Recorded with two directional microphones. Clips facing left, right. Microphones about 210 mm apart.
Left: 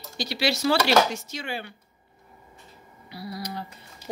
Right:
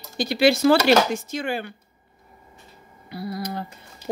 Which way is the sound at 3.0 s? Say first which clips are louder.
Right 5 dB; 50° right (ahead or behind).